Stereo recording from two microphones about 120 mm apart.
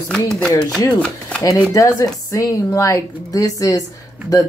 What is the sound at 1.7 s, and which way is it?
Speech, 30° left (ahead or behind).